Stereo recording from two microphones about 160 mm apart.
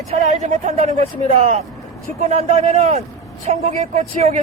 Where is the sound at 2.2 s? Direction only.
45° right (ahead or behind).